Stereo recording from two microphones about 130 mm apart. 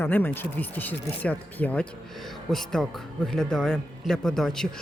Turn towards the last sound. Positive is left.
turn(degrees=5)  # may be behind; listen again after turning